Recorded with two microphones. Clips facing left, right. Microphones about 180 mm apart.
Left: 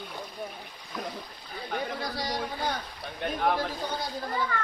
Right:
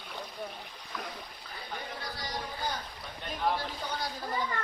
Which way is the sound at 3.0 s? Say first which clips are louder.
Left 5 dB; 70° left (ahead or behind).